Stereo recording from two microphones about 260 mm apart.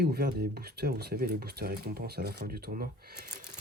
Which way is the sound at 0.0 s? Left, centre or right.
Right.